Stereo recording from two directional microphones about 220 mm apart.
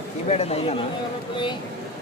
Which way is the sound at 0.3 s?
30° left (ahead or behind).